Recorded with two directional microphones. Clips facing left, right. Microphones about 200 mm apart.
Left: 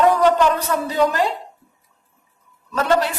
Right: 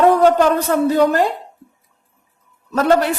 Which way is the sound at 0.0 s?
45° right (ahead or behind).